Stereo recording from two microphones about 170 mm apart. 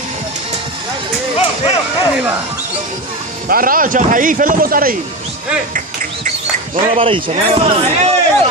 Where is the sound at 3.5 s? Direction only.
55° right (ahead or behind).